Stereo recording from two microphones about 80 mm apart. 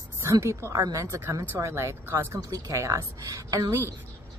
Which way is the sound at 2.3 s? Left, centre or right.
Right.